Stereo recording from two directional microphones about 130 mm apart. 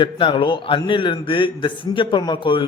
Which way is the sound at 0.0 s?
40° left (ahead or behind).